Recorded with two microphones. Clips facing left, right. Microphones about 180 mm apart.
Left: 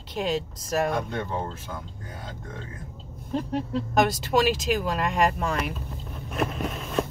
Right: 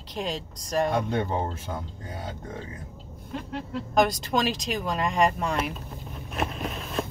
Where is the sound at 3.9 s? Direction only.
5° left (ahead or behind).